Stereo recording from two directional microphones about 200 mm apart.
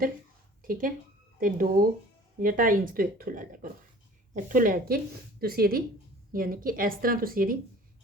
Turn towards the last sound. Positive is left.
turn(degrees=-45)  # may be behind; listen again after turning